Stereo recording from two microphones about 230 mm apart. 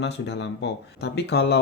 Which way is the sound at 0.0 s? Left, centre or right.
Left.